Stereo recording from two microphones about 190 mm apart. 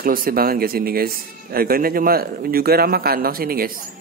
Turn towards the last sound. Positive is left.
turn(degrees=-50)  # may be behind; listen again after turning